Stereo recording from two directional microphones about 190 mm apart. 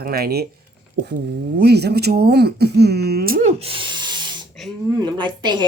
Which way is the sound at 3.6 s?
30° right (ahead or behind).